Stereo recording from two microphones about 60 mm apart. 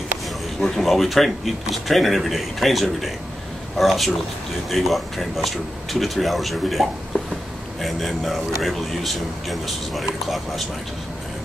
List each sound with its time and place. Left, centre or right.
0.6 s speech: centre